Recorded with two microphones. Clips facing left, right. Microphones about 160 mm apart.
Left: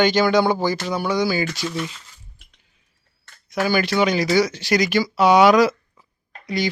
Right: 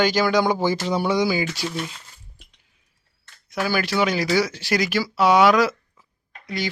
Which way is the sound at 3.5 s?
5° right (ahead or behind).